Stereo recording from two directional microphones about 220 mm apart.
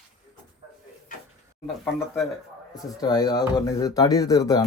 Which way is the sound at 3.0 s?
15° left (ahead or behind).